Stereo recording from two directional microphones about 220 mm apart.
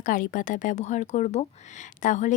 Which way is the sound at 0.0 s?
35° left (ahead or behind).